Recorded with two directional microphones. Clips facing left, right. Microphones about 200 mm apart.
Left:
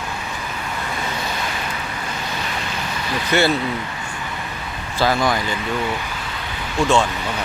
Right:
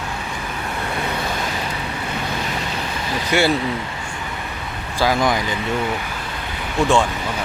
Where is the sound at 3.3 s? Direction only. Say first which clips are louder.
Even; 10° right (ahead or behind).